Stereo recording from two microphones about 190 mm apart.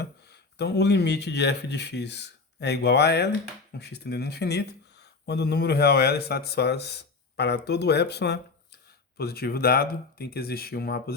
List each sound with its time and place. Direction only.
0.6 s speech: 60° left (ahead or behind)